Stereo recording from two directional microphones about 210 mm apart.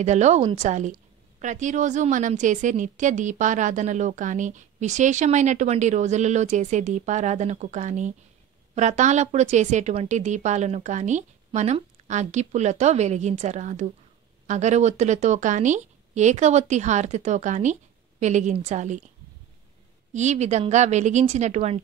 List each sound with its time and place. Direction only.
0.0 s a woman's voice: 35° right (ahead or behind)
20.1 s a woman's voice: 35° right (ahead or behind)